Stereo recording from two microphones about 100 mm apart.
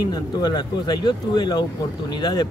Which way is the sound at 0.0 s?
45° left (ahead or behind).